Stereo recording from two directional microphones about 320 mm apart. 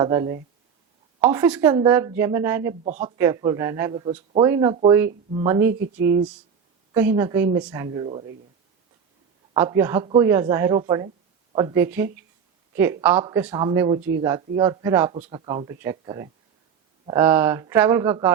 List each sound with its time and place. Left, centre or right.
0.0 s speech: centre
9.6 s speech: centre